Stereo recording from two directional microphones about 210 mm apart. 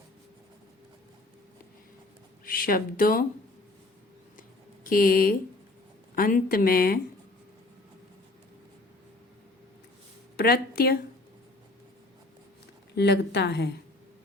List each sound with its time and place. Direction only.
2.4 s speech: 40° left (ahead or behind)
4.4 s a sound: 40° left (ahead or behind)
6.1 s speech: 40° left (ahead or behind)
10.3 s speech: 45° left (ahead or behind)
13.0 s speech: 50° left (ahead or behind)